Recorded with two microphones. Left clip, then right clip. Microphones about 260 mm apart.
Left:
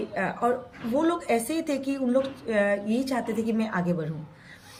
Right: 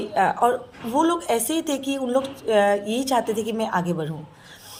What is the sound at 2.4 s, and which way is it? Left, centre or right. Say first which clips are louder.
Speech: right 9 dB; right.